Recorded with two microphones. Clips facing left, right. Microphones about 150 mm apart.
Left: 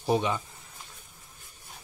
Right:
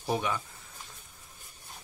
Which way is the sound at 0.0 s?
20° left (ahead or behind).